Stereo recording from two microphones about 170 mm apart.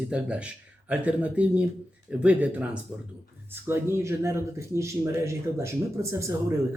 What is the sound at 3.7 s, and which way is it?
Speech, 15° right (ahead or behind).